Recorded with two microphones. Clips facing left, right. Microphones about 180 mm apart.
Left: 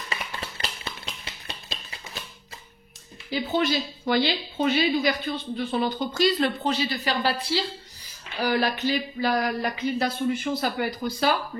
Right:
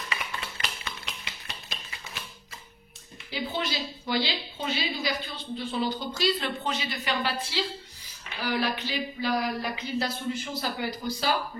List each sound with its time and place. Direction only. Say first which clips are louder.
0.4 s a sound: left 2 dB; 35° left (ahead or behind)
3.5 s a woman's voice: left 11 dB; 50° left (ahead or behind)
6.6 s a woman's voice: left 6 dB; 35° left (ahead or behind); by 11.3 s 55° left (ahead or behind)